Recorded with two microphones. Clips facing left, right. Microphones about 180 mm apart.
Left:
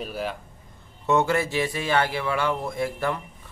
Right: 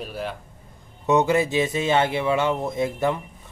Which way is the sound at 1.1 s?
20° right (ahead or behind).